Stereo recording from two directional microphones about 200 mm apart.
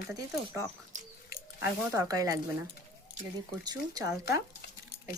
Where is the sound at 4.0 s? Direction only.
15° right (ahead or behind).